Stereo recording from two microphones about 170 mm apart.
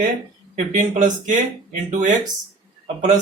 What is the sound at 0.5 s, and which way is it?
Speech, 50° right (ahead or behind).